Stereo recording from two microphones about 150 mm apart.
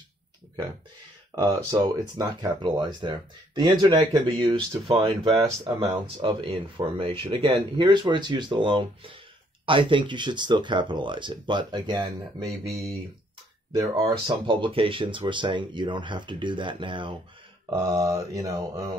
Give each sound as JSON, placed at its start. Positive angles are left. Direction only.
{"t": 1.3, "sound": "speech", "side_deg": -20}
{"t": 17.7, "sound": "speech", "side_deg": -20}